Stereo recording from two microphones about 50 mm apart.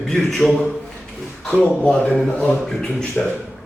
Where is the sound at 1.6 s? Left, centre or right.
Centre.